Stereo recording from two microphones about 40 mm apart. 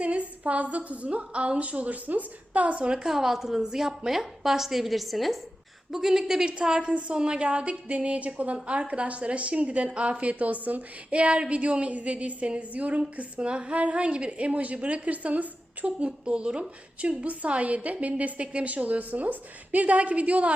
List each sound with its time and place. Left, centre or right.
0.0 s a woman's voice: right
2.8 s a woman's voice: right
3.1 s a woman's voice: centre; by 16.0 s right
16.0 s a woman's voice: right